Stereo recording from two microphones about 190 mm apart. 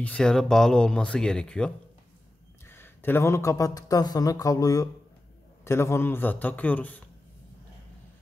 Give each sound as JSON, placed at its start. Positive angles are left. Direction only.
{"t": 0.0, "sound": "speech", "side_deg": 5}
{"t": 2.7, "sound": "speech", "side_deg": 10}